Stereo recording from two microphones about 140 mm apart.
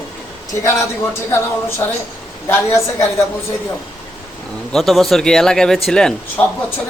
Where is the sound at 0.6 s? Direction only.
20° left (ahead or behind).